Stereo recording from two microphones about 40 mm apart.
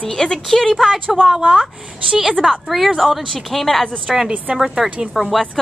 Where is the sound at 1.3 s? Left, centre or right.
Right.